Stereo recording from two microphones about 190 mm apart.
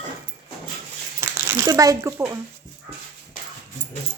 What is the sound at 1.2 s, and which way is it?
Speech, 15° right (ahead or behind).